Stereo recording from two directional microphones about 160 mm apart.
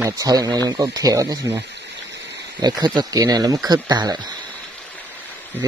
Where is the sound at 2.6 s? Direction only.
25° right (ahead or behind).